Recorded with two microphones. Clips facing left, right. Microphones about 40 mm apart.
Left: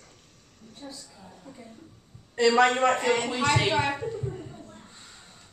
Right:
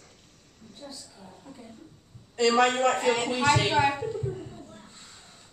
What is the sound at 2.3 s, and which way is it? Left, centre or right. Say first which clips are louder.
Speech: left 1 dB; left.